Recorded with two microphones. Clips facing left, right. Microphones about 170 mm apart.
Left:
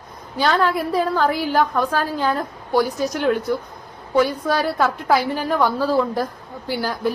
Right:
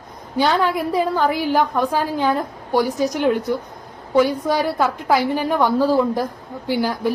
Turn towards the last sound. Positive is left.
turn(degrees=-15)  # may be behind; listen again after turning